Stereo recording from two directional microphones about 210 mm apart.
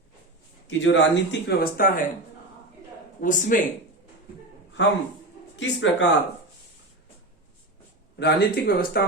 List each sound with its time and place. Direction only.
0.7 s speech: 60° left (ahead or behind); by 2.0 s 45° left (ahead or behind)
3.2 s a man's voice: 35° left (ahead or behind)
4.8 s speech: 55° left (ahead or behind)
8.2 s speech: 45° left (ahead or behind)